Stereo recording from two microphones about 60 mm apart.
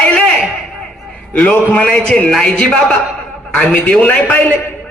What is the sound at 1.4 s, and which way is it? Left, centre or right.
Speech, left.